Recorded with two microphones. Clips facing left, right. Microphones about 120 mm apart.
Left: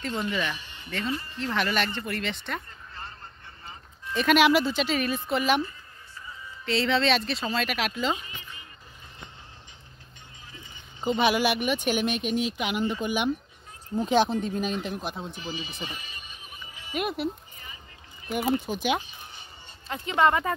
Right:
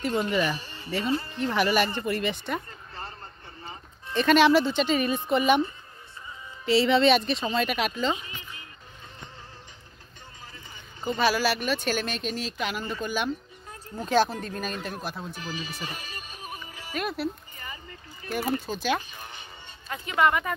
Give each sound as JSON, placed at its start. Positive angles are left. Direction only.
{"t": 0.3, "sound": "speech", "side_deg": -5}
{"t": 0.6, "sound": "a sound", "side_deg": -35}
{"t": 1.4, "sound": "speech", "side_deg": -5}
{"t": 4.1, "sound": "speech", "side_deg": 5}
{"t": 6.6, "sound": "speech", "side_deg": -5}
{"t": 11.0, "sound": "speech", "side_deg": 20}
{"t": 15.5, "sound": "music", "side_deg": -45}
{"t": 16.9, "sound": "speech", "side_deg": 15}
{"t": 19.1, "sound": "a sound", "side_deg": -65}
{"t": 19.9, "sound": "speech", "side_deg": 25}